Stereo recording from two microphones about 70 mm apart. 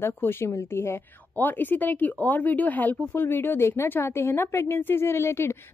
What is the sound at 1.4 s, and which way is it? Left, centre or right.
Speech, left.